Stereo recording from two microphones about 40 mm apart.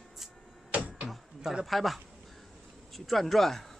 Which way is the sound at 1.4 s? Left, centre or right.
Centre.